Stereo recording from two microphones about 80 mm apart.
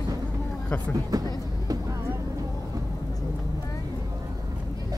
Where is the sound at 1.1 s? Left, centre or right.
Right.